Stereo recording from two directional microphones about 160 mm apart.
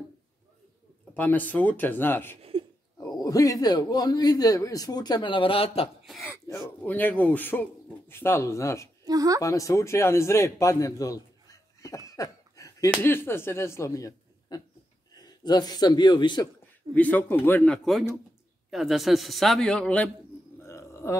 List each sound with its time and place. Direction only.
1.1 s speech: 10° left (ahead or behind)
2.5 s a sound: 35° right (ahead or behind)
3.0 s speech: 20° left (ahead or behind)
6.0 s speech: centre (ahead or behind)
6.8 s speech: 10° left (ahead or behind)
9.0 s a woman's voice: 20° right (ahead or behind)
9.4 s a man's voice: 20° left (ahead or behind)
12.1 s a sound: 20° left (ahead or behind)
13.0 s a man's voice: 15° left (ahead or behind)
16.9 s speech: 10° left (ahead or behind)
18.7 s a man's voice: centre (ahead or behind)
20.6 s a sound: 15° left (ahead or behind)